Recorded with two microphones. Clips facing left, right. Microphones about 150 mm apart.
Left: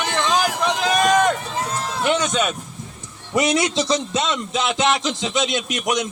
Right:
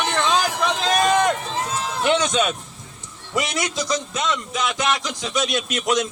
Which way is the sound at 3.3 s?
25° left (ahead or behind).